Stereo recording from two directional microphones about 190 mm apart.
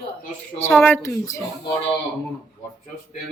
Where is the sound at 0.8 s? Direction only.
15° left (ahead or behind).